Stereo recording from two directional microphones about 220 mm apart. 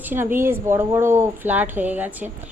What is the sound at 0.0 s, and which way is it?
A woman's voice, 10° right (ahead or behind).